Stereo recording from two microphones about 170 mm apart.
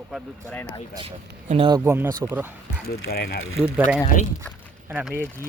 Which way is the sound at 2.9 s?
70° left (ahead or behind).